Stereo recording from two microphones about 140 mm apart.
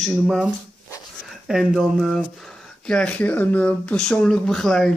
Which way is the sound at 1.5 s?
Centre (ahead or behind).